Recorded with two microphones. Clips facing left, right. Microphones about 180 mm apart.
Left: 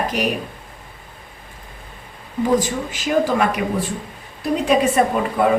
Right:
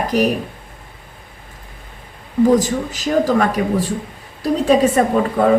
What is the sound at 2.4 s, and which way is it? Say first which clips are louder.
A woman's voice: right 5 dB; 40° right (ahead or behind).